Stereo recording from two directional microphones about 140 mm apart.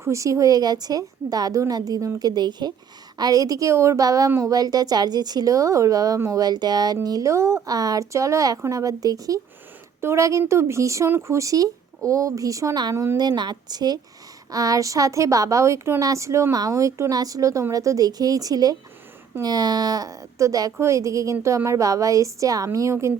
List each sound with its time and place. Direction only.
0.0 s a woman's voice: 20° right (ahead or behind)